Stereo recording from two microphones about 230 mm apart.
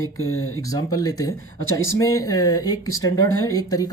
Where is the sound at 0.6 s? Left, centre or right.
Centre.